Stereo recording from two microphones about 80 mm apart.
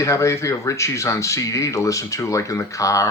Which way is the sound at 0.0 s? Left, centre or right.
Left.